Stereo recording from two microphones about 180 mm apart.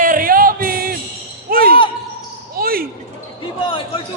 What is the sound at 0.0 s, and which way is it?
Music, 50° right (ahead or behind).